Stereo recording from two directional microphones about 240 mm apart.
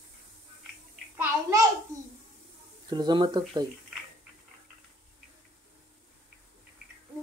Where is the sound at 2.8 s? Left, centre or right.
Centre.